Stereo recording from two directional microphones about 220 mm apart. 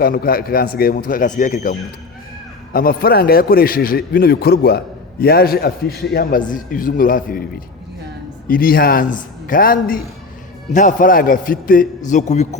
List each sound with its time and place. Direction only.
0.0 s a man's voice: 40° left (ahead or behind)
2.7 s a man's voice: 40° left (ahead or behind)
8.4 s a man's voice: 40° left (ahead or behind)